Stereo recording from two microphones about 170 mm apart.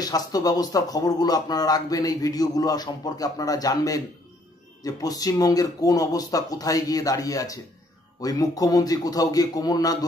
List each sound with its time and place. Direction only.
0.0 s speech: 20° left (ahead or behind)